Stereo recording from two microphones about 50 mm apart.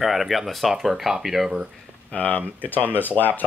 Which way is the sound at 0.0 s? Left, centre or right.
Centre.